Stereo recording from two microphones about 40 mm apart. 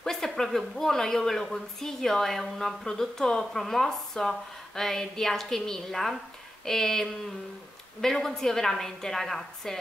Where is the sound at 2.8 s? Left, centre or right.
Centre.